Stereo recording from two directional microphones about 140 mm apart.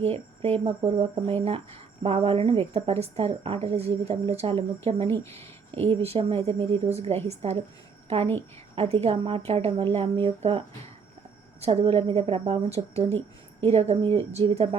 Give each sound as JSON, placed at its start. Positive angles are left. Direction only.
{"t": 0.0, "sound": "speech", "side_deg": -45}
{"t": 5.0, "sound": "speech", "side_deg": 20}
{"t": 5.7, "sound": "speech", "side_deg": -45}
{"t": 8.7, "sound": "speech", "side_deg": -45}
{"t": 11.6, "sound": "speech", "side_deg": -40}
{"t": 13.1, "sound": "a sound", "side_deg": 15}
{"t": 13.7, "sound": "speech", "side_deg": -50}